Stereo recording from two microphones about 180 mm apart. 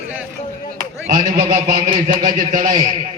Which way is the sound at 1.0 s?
40° right (ahead or behind).